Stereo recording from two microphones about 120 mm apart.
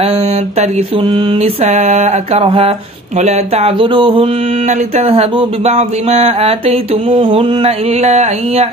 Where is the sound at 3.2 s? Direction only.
65° right (ahead or behind); by 4.3 s 45° right (ahead or behind).